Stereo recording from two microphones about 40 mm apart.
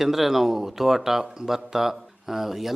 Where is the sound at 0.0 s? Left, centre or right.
Centre.